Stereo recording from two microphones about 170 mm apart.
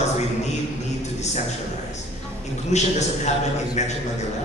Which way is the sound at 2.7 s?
40° left (ahead or behind).